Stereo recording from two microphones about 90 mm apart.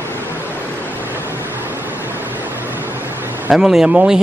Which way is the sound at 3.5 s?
5° right (ahead or behind).